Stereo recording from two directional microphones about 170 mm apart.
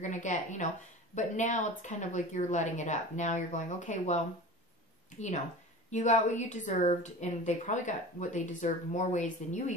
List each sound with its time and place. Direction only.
0.0 s a woman's voice: 45° left (ahead or behind)